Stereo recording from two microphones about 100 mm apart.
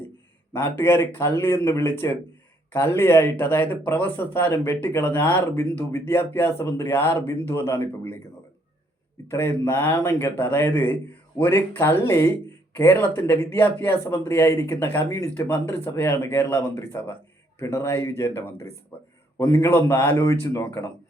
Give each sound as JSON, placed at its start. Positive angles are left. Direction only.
{"t": 0.5, "sound": "speech", "side_deg": 20}
{"t": 9.3, "sound": "speech", "side_deg": 25}